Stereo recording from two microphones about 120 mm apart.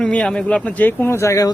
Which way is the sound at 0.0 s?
5° left (ahead or behind).